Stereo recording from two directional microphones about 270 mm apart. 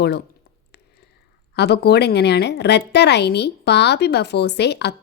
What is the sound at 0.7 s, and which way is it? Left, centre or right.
Whispering, left.